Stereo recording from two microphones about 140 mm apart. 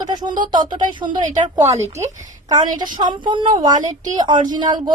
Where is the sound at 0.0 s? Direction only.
30° right (ahead or behind).